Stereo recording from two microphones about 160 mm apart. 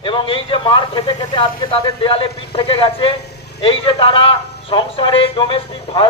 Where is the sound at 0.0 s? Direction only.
35° left (ahead or behind).